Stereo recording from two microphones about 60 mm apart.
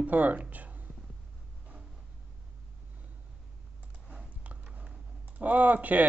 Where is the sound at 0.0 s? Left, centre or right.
Right.